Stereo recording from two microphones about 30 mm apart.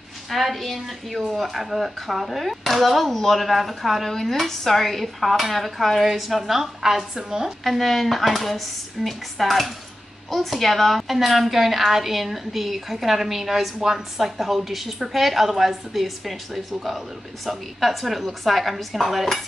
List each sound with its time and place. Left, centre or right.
0.3 s a woman's voice: centre
7.6 s a woman's voice: centre